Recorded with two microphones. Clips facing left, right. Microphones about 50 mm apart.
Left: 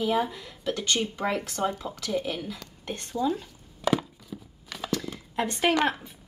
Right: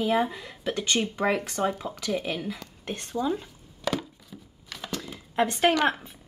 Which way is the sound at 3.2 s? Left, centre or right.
Centre.